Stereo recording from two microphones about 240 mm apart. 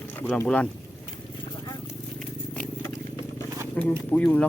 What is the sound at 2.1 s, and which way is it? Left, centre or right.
Purr, centre.